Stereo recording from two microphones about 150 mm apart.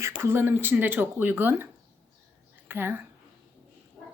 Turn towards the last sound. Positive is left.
turn(degrees=-15)  # may be behind; listen again after turning